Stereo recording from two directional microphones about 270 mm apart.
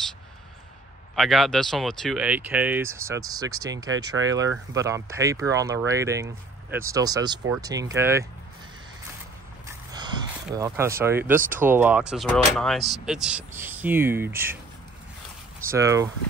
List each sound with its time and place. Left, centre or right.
1.1 s speech: centre
9.7 s a sound: centre
11.6 s speech: centre
15.7 s speech: centre